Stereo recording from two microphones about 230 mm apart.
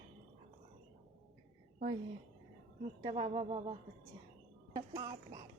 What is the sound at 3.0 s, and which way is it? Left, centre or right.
Speech, right.